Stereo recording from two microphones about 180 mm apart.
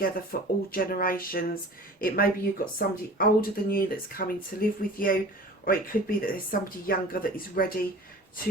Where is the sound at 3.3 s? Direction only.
55° left (ahead or behind).